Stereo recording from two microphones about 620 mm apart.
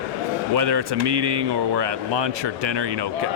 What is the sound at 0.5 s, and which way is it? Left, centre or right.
A man's voice, right.